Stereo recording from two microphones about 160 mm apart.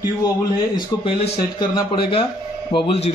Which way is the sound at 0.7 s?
30° left (ahead or behind).